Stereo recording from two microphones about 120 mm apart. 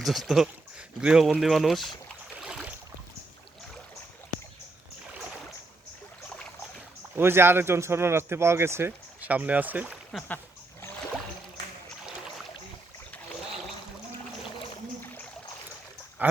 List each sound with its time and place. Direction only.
0.0 s speech: centre (ahead or behind)
2.3 s boat: 5° right (ahead or behind)
7.2 s speech: 20° right (ahead or behind)
10.1 s speech: 5° left (ahead or behind)
10.3 s a sound: 20° left (ahead or behind)
12.0 s boat: 5° right (ahead or behind)
15.0 s rowboat: 15° left (ahead or behind)
16.2 s speech: 15° right (ahead or behind)